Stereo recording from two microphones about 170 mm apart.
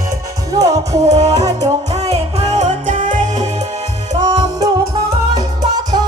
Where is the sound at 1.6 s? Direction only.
40° right (ahead or behind).